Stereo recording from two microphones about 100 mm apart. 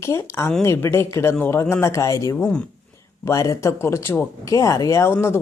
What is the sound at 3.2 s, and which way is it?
Speech, 30° left (ahead or behind).